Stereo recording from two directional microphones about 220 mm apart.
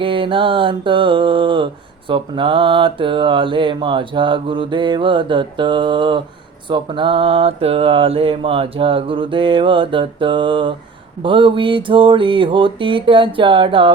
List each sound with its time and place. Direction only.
0.0 s mantra: 25° right (ahead or behind)